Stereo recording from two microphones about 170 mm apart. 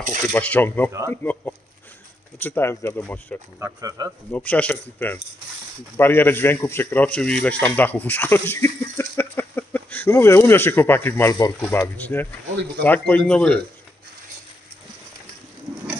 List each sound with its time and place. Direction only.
0.2 s a man's voice: 10° left (ahead or behind)
3.5 s speech: 20° right (ahead or behind)
4.3 s a man's voice: 10° left (ahead or behind)